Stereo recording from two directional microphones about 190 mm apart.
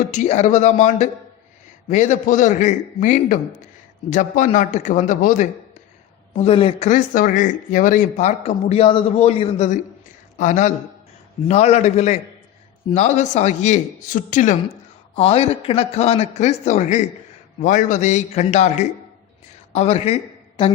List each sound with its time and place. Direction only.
0.1 s speech: 40° left (ahead or behind)
6.3 s speech: 30° left (ahead or behind)
6.8 s a man's voice: 45° left (ahead or behind)
15.1 s speech: 30° left (ahead or behind)